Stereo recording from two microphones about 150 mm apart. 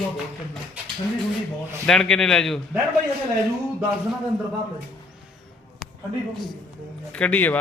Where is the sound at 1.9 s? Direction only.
5° left (ahead or behind).